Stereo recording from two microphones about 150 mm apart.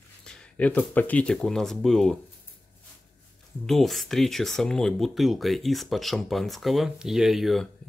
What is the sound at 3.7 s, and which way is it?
Speech, centre (ahead or behind).